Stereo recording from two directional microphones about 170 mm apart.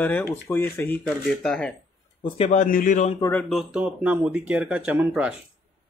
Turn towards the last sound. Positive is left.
turn(degrees=-5)  # may be behind; listen again after turning